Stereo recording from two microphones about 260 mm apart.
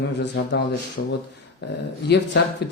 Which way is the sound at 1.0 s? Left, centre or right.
Left.